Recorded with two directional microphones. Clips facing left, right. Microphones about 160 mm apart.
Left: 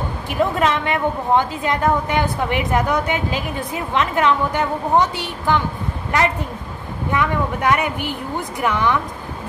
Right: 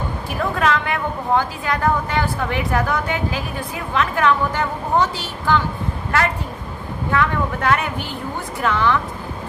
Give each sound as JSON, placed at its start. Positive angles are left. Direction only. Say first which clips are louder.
{"t": 0.4, "sound": "a woman's voice", "louder": "left 2 dB", "side_deg": 20}
{"t": 7.1, "sound": "speech", "louder": "even", "side_deg": 15}